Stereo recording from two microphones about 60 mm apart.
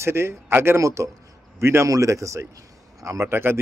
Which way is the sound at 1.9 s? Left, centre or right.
Right.